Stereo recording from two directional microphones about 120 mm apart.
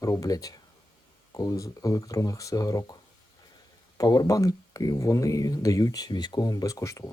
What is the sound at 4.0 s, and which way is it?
Speech, 30° left (ahead or behind).